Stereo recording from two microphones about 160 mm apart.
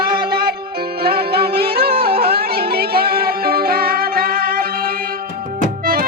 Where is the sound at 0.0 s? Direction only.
70° right (ahead or behind).